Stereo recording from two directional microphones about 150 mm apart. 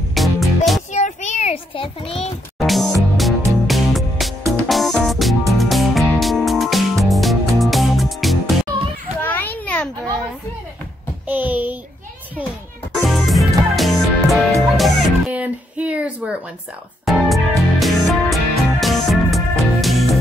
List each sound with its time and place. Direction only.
0.1 s music: centre (ahead or behind)
0.9 s child singing: 50° left (ahead or behind)
2.6 s music: centre (ahead or behind)
8.7 s children playing: 25° right (ahead or behind)
9.2 s children playing: 10° left (ahead or behind)
11.2 s a sound: 10° right (ahead or behind)
12.9 s music: centre (ahead or behind)